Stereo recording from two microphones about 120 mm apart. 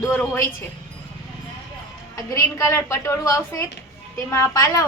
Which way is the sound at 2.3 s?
25° left (ahead or behind).